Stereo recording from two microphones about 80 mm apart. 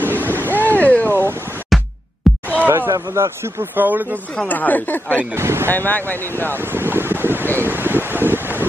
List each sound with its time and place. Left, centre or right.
0.2 s a sound: right
0.7 s vehicle: left
1.0 s a sound: right
1.7 s music: centre
2.3 s heart murmur: centre
2.6 s a sound: right
2.9 s a man's voice: right
3.7 s speech: right
4.5 s speech: left
5.3 s a man's voice: right
5.7 s speech: left
6.5 s wind: right